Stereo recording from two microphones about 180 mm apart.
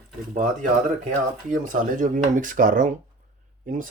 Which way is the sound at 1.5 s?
45° right (ahead or behind).